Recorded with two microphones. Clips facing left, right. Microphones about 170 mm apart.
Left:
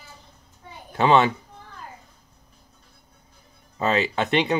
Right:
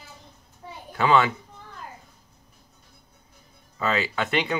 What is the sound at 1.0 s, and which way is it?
Speech, 25° left (ahead or behind).